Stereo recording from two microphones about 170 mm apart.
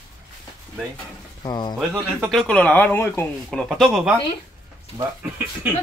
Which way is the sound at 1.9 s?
15° right (ahead or behind).